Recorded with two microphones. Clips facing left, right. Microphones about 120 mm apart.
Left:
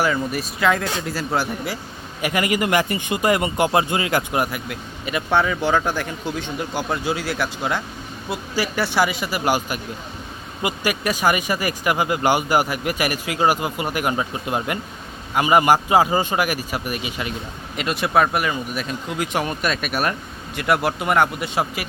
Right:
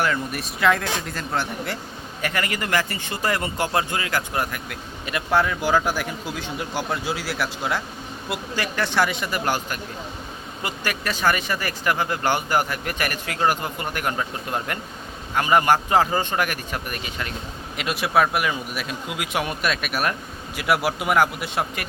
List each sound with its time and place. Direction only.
0.0 s a man's voice: 5° left (ahead or behind)
4.7 s a man's voice: centre (ahead or behind)
17.7 s a man's voice: centre (ahead or behind)